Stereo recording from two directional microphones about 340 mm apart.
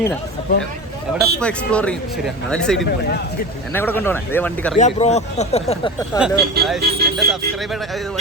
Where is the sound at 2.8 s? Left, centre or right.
Left.